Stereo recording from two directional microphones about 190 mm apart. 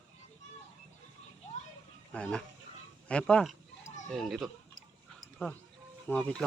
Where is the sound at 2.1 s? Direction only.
5° left (ahead or behind).